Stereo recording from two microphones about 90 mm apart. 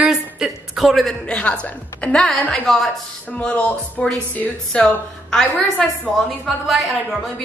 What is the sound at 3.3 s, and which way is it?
A woman's voice, 15° left (ahead or behind).